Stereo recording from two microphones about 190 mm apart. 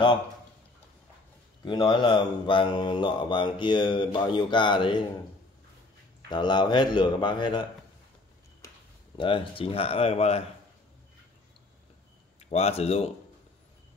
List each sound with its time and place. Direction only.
1.6 s mantra: 25° left (ahead or behind)
6.3 s mantra: 25° left (ahead or behind)
9.1 s speech: 25° left (ahead or behind)
12.4 s speech: 35° left (ahead or behind)